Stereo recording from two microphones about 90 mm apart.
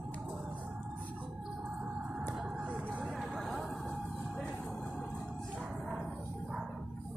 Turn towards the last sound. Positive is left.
turn(degrees=-5)  # may be behind; listen again after turning